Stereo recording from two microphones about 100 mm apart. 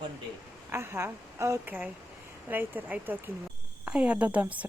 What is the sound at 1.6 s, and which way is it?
A woman's voice, 15° right (ahead or behind).